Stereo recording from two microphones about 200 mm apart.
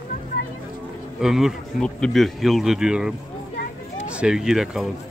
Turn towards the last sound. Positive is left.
turn(degrees=0)  # may be behind; listen again after turning